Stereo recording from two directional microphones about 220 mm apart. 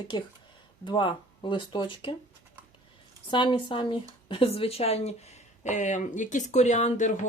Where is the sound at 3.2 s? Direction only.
20° left (ahead or behind).